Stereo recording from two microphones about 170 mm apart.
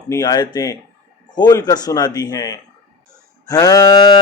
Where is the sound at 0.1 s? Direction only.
20° left (ahead or behind).